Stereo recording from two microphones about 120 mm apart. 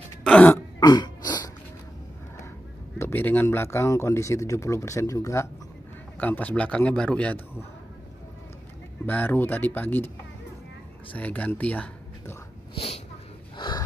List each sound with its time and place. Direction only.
0.2 s throat clearing: 10° left (ahead or behind)
0.7 s a sound: 35° left (ahead or behind)
3.0 s speech: 20° left (ahead or behind)
6.1 s a man's voice: 15° left (ahead or behind)
9.0 s a man's voice: 15° left (ahead or behind)
11.1 s speech: 15° left (ahead or behind)
12.7 s a sound: 55° left (ahead or behind)
13.6 s snort: 35° left (ahead or behind)